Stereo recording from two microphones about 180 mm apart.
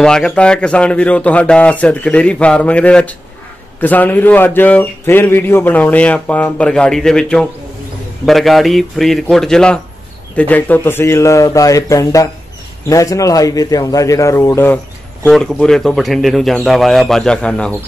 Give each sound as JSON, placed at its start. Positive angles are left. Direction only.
{"t": 0.0, "sound": "a man's voice", "side_deg": 5}
{"t": 15.2, "sound": "a man's voice", "side_deg": 5}